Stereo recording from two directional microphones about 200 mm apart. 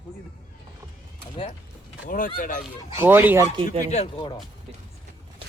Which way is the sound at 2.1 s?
45° left (ahead or behind).